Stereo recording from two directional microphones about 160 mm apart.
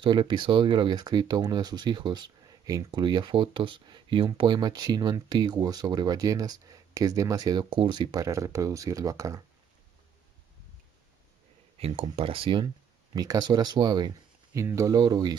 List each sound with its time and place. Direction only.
0.0 s speech: 30° right (ahead or behind)
11.8 s speech: 35° right (ahead or behind)